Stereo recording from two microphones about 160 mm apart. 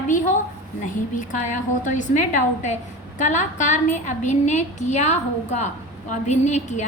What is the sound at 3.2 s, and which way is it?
A woman's voice, 50° left (ahead or behind).